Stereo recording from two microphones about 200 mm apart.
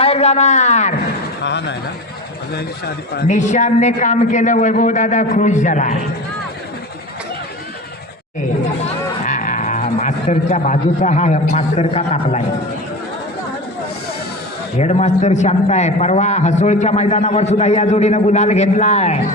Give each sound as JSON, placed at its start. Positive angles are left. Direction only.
{"t": 0.0, "sound": "a man's voice", "side_deg": 30}
{"t": 1.5, "sound": "a man's voice", "side_deg": 60}
{"t": 3.2, "sound": "a man's voice", "side_deg": 40}
{"t": 9.2, "sound": "speech", "side_deg": 40}
{"t": 14.8, "sound": "a man's voice", "side_deg": 35}